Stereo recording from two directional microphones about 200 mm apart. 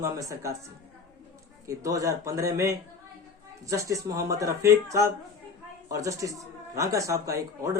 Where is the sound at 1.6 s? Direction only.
15° right (ahead or behind).